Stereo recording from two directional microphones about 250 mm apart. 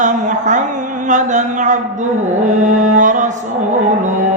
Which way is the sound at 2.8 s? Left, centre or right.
Right.